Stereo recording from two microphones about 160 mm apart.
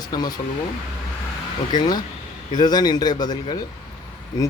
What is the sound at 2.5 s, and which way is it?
Speech, 25° left (ahead or behind).